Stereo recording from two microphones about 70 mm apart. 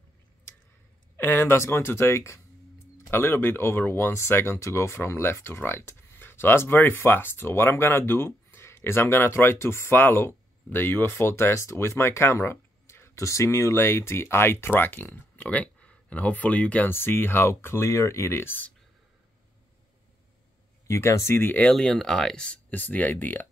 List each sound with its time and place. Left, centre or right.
1.1 s speech: left
16.9 s speech: left
20.8 s speech: left
21.7 s speech: centre
22.7 s speech: left